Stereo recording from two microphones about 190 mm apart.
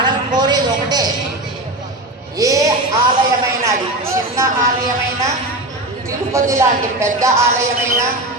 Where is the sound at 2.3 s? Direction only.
15° right (ahead or behind).